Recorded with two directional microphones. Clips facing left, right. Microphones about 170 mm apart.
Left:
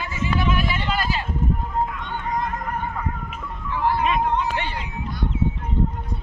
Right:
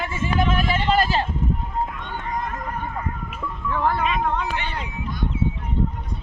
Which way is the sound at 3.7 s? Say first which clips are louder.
Left 1 dB; 55° right (ahead or behind).